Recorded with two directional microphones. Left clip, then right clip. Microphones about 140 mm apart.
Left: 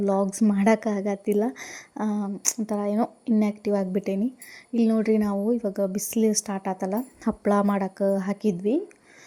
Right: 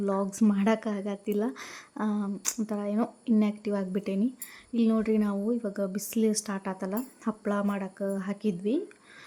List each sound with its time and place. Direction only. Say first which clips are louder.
0.0 s speech: left 5 dB; 20° left (ahead or behind)
7.4 s speech: left 9 dB; 35° left (ahead or behind)